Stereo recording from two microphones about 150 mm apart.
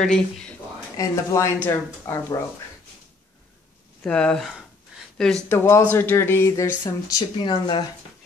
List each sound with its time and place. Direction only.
0.0 s speech: 5° left (ahead or behind)
0.9 s speech: 20° left (ahead or behind)
4.0 s speech: 5° left (ahead or behind); by 7.8 s 30° left (ahead or behind)